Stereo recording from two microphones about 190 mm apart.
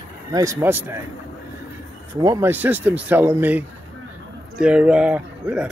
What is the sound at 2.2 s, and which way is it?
Speech, 20° right (ahead or behind).